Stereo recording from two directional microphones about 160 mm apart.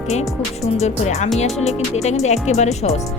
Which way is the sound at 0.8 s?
45° left (ahead or behind).